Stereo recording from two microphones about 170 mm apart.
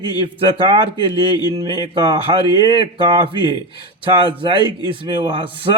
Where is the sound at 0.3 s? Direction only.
30° right (ahead or behind).